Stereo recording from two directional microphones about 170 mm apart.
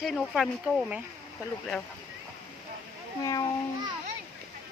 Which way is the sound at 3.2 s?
20° left (ahead or behind).